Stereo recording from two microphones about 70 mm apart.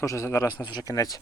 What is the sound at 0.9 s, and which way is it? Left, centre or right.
Speech, left.